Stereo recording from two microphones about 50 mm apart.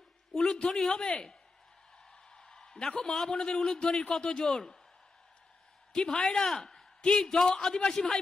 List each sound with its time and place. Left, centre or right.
0.4 s a man's voice: centre
5.9 s a man's voice: centre